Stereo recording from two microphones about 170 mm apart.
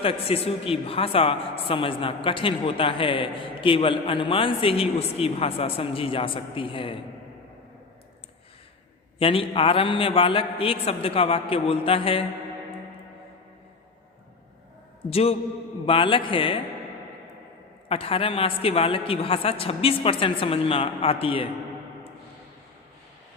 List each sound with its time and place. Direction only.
0.0 s a woman's voice: 35° left (ahead or behind)
9.1 s a woman's voice: 30° left (ahead or behind)
15.1 s a woman's voice: 35° left (ahead or behind)
17.8 s a woman's voice: 35° left (ahead or behind)